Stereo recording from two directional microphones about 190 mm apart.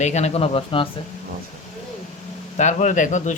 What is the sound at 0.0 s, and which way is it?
Speech, 35° left (ahead or behind).